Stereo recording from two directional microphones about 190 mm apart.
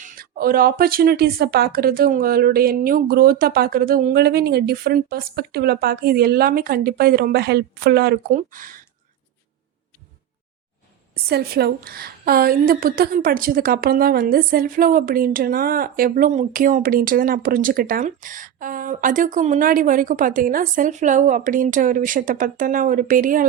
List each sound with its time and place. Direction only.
0.0 s a woman's voice: 50° right (ahead or behind)
8.4 s a woman's voice: 45° right (ahead or behind)
11.1 s a woman's voice: 55° right (ahead or behind)